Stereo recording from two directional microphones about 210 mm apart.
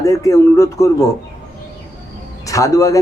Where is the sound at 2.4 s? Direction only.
15° left (ahead or behind).